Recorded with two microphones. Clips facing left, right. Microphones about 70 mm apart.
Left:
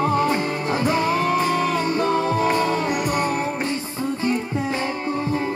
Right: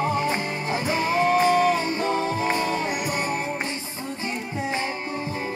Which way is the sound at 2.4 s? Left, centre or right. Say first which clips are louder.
Left 4 dB; centre.